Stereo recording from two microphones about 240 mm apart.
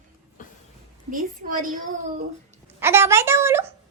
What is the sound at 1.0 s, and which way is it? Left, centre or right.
A woman's voice, right.